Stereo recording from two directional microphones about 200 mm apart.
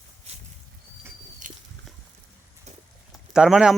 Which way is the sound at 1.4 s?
40° right (ahead or behind).